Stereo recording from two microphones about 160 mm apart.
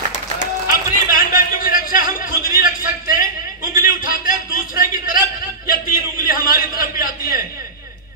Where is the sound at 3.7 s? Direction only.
65° left (ahead or behind).